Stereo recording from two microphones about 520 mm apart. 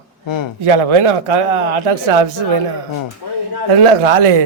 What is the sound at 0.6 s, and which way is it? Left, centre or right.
A man's voice, right.